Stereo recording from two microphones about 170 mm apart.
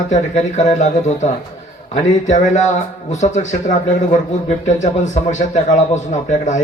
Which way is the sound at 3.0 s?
45° left (ahead or behind).